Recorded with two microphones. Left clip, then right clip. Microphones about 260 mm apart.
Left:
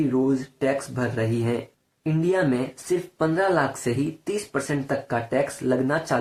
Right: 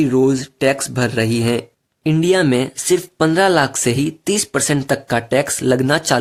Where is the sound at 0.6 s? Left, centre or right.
Right.